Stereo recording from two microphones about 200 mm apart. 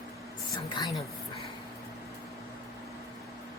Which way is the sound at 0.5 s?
20° left (ahead or behind).